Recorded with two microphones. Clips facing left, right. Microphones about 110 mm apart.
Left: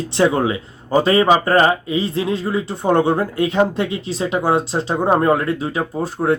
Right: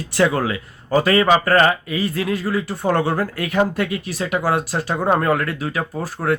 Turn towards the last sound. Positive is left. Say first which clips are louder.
# left 3 dB
turn(degrees=25)  # may be behind; listen again after turning